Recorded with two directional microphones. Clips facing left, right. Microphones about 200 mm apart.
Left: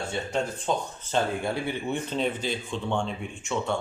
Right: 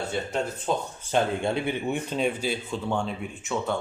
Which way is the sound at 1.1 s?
20° right (ahead or behind).